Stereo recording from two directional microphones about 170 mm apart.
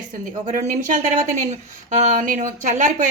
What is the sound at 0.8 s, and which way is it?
Speech, 50° right (ahead or behind).